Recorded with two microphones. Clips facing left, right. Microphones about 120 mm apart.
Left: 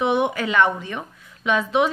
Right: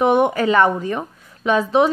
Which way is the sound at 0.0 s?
45° right (ahead or behind).